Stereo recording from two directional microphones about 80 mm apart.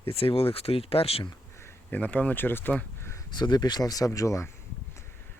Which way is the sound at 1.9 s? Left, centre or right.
Left.